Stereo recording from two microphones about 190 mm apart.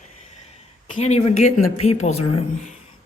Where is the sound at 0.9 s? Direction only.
35° left (ahead or behind).